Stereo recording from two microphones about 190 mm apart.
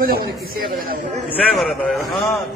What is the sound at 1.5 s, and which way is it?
Speech, centre (ahead or behind).